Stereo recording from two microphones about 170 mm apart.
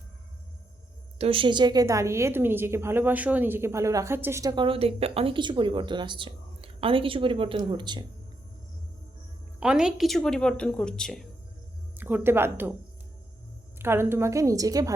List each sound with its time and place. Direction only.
1.2 s a woman's voice: 30° right (ahead or behind)
9.6 s speech: 5° right (ahead or behind)
11.9 s speech: 10° right (ahead or behind)
13.7 s a woman's voice: 15° right (ahead or behind)